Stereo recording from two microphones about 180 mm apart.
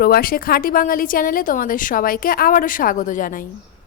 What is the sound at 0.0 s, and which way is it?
A woman's voice, 55° left (ahead or behind).